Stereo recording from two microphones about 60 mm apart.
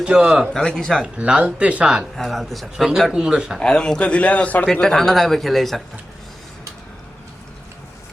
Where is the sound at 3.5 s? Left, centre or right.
Centre.